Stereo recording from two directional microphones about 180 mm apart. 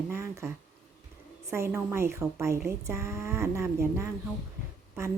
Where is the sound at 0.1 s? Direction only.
15° right (ahead or behind).